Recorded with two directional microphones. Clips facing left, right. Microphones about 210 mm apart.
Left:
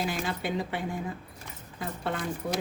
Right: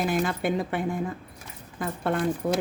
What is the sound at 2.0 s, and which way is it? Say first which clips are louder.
Speech: right 7 dB; 55° right (ahead or behind).